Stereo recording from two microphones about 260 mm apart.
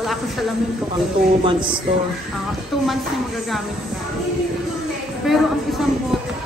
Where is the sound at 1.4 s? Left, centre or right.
Centre.